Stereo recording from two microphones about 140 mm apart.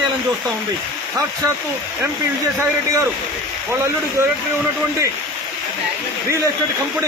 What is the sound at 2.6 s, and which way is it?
Speech, 20° right (ahead or behind).